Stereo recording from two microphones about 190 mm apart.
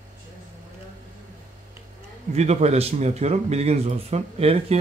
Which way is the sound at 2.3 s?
35° right (ahead or behind).